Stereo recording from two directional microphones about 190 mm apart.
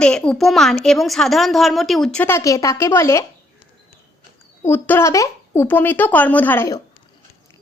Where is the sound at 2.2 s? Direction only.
15° left (ahead or behind).